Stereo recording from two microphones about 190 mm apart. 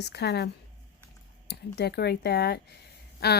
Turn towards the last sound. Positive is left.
turn(degrees=60)  # may be behind; listen again after turning